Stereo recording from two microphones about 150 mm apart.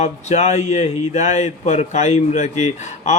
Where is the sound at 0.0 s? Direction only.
50° left (ahead or behind).